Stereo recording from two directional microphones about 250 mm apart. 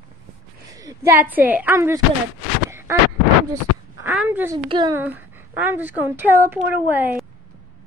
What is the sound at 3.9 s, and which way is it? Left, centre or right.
Speech, centre.